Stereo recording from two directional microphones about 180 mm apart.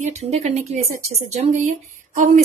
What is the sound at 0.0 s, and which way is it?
Speech, 40° right (ahead or behind).